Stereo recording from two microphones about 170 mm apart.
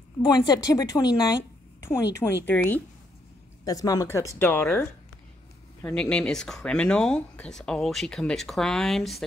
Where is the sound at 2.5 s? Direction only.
10° left (ahead or behind).